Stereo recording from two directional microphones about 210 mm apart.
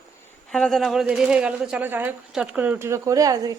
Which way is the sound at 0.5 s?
Centre (ahead or behind).